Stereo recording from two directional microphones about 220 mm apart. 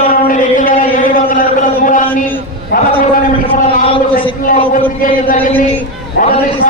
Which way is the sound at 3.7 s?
40° left (ahead or behind).